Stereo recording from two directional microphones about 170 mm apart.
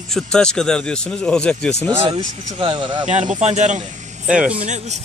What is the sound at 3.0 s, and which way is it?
Speech, 50° right (ahead or behind).